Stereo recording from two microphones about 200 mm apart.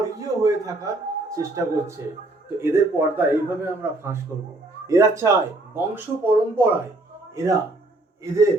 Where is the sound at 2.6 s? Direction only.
10° right (ahead or behind).